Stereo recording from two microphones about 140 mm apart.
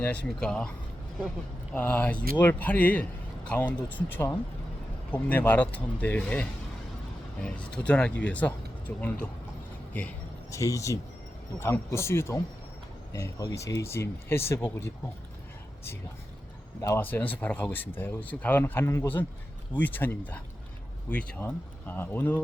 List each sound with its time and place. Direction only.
0.0 s speech: 10° left (ahead or behind)
1.7 s speech: 15° left (ahead or behind)
7.4 s speech: 5° left (ahead or behind)
10.5 s speech: 20° left (ahead or behind)
16.8 s speech: 15° left (ahead or behind)